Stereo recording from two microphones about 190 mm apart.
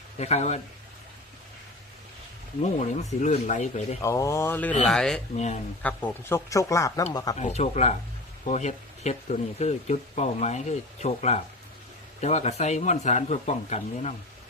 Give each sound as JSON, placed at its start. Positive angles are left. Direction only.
{"t": 0.2, "sound": "speech", "side_deg": 35}
{"t": 2.7, "sound": "speech", "side_deg": 40}
{"t": 4.0, "sound": "speech", "side_deg": 15}
{"t": 7.3, "sound": "speech", "side_deg": 35}